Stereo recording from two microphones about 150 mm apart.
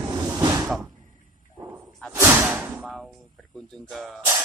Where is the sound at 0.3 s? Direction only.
25° right (ahead or behind).